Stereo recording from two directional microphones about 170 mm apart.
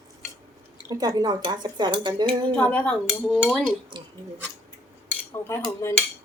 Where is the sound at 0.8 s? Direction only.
20° right (ahead or behind).